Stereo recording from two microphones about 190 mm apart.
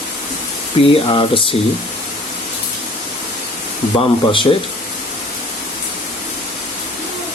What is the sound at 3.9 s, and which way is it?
Speech, 30° left (ahead or behind).